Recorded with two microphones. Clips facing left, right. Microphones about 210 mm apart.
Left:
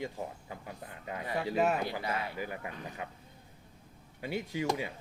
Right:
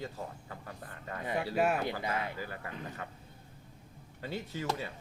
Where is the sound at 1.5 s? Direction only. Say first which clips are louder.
Left 1 dB; 10° right (ahead or behind).